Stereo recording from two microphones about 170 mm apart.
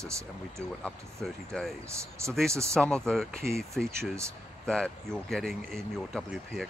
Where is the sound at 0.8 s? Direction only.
5° left (ahead or behind).